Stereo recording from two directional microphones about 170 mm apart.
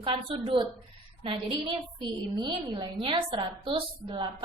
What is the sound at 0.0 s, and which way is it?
A woman's voice, 30° right (ahead or behind).